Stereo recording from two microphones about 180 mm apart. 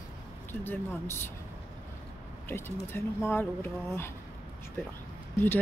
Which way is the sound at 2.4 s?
15° left (ahead or behind).